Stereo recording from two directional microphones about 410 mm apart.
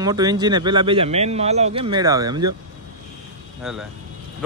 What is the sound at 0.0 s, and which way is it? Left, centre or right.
Speech, centre.